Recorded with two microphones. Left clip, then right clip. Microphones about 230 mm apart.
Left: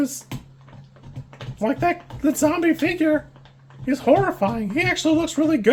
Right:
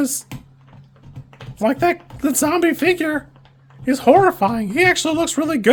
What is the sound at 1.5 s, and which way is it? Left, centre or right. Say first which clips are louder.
Speech: right 4 dB; right.